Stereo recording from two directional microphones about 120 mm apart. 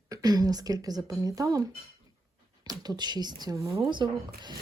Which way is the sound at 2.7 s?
35° right (ahead or behind).